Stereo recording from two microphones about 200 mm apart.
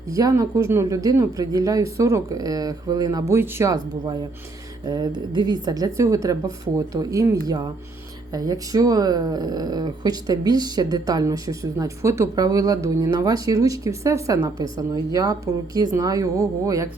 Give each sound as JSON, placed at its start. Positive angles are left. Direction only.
{"t": 0.1, "sound": "speech", "side_deg": -15}